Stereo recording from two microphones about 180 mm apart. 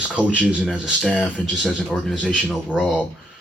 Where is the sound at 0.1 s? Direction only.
5° right (ahead or behind).